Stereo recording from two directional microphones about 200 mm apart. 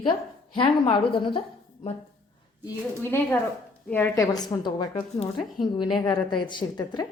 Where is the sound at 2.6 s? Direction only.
10° left (ahead or behind).